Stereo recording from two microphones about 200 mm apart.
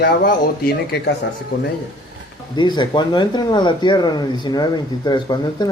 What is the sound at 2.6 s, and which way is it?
Speech, 20° left (ahead or behind).